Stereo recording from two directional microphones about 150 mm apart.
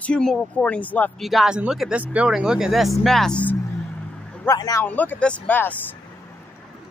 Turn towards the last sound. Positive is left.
turn(degrees=10)  # may be behind; listen again after turning